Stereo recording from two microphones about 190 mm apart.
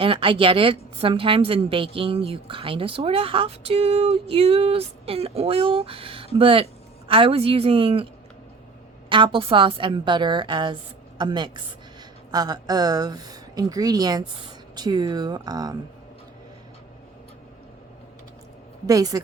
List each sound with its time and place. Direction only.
0.0 s a woman's voice: 30° right (ahead or behind)
9.0 s a woman's voice: 25° right (ahead or behind)
18.9 s a woman's voice: 20° right (ahead or behind)